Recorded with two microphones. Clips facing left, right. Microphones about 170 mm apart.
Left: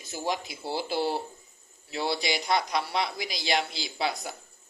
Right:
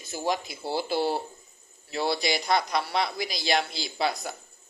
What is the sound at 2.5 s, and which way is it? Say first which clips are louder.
Speech: right 1 dB; 10° left (ahead or behind).